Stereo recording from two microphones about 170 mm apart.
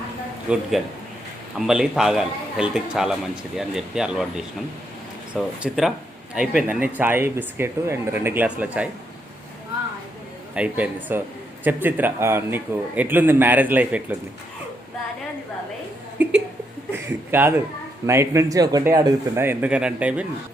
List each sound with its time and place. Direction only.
0.4 s a man's voice: 5° right (ahead or behind)
10.5 s a man's voice: 10° right (ahead or behind)
17.3 s a man's voice: 10° right (ahead or behind)